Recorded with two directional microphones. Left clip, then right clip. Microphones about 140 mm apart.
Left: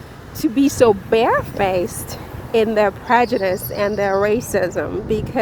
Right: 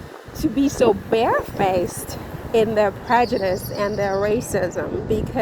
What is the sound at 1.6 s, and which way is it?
A woman's voice, 20° left (ahead or behind).